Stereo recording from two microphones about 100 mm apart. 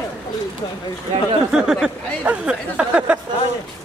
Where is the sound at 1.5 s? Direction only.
5° right (ahead or behind).